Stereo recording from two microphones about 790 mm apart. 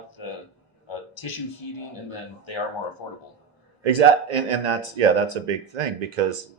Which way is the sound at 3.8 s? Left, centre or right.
Right.